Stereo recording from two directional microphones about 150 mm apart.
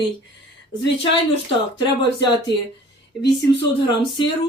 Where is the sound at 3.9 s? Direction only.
30° left (ahead or behind).